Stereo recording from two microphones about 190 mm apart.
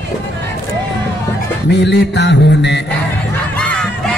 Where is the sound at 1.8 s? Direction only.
65° left (ahead or behind).